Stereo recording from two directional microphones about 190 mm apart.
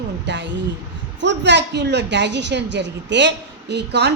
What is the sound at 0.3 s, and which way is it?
Vehicle, 65° right (ahead or behind).